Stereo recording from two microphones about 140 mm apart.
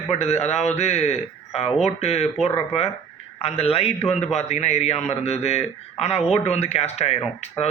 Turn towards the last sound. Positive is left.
turn(degrees=50)  # may be behind; listen again after turning